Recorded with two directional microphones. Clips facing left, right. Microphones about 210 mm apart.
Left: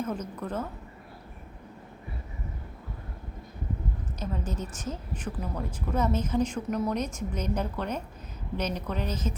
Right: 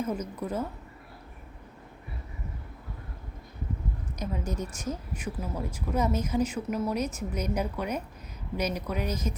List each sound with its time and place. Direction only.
0.0 s speech: 10° right (ahead or behind)
4.2 s speech: 10° right (ahead or behind)